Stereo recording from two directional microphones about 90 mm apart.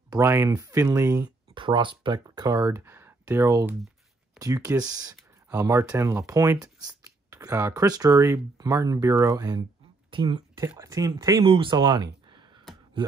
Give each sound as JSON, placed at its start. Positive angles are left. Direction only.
{"t": 0.2, "sound": "speech", "side_deg": -30}
{"t": 1.2, "sound": "speech", "side_deg": -60}
{"t": 6.6, "sound": "a sound", "side_deg": -40}
{"t": 7.7, "sound": "speech", "side_deg": -45}
{"t": 10.1, "sound": "speech", "side_deg": -75}
{"t": 10.8, "sound": "speech", "side_deg": -40}
{"t": 11.4, "sound": "speech", "side_deg": -70}